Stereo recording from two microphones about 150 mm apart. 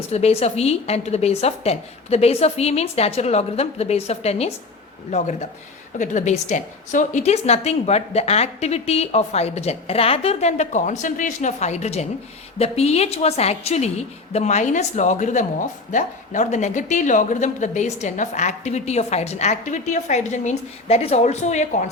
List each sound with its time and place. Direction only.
0.1 s speech: 45° left (ahead or behind)